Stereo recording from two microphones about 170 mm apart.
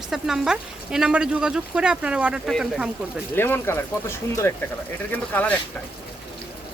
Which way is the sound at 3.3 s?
15° left (ahead or behind).